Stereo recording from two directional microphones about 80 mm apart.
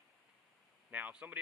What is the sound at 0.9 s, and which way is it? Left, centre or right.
Speech, centre.